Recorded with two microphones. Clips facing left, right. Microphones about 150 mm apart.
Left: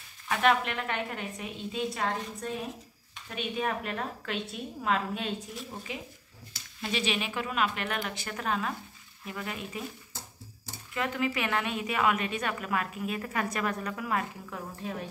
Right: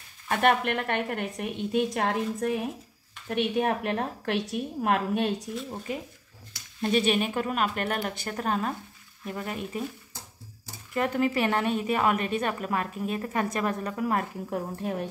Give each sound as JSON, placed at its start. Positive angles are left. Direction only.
{"t": 0.3, "sound": "a woman's voice", "side_deg": -50}
{"t": 4.4, "sound": "a woman's voice", "side_deg": -70}
{"t": 5.9, "sound": "a woman's voice", "side_deg": -45}
{"t": 11.0, "sound": "a woman's voice", "side_deg": -40}